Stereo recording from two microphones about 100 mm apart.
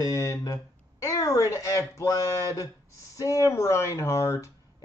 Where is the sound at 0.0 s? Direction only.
35° left (ahead or behind).